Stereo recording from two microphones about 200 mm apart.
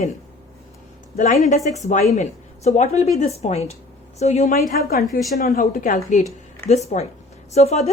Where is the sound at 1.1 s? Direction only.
40° left (ahead or behind).